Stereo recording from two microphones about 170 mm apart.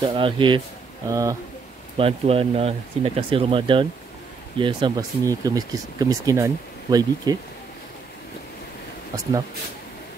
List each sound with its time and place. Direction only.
0.0 s speech: 30° right (ahead or behind)
2.0 s speech: 35° right (ahead or behind)